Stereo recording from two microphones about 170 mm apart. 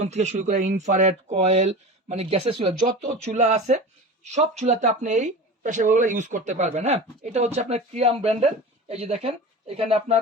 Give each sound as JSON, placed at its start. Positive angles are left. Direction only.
{"t": 0.0, "sound": "speech", "side_deg": -40}